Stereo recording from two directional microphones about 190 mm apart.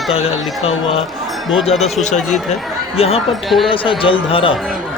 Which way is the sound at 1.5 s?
Centre (ahead or behind).